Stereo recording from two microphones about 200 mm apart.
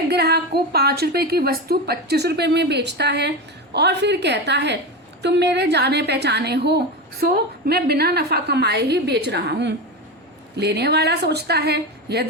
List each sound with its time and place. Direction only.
0.1 s a woman's voice: 55° right (ahead or behind)